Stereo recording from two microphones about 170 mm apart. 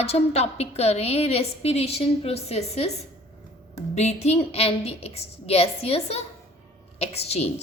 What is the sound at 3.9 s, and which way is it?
A woman's voice, 40° left (ahead or behind).